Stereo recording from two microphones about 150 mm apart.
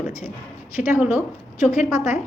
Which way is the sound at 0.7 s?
5° right (ahead or behind).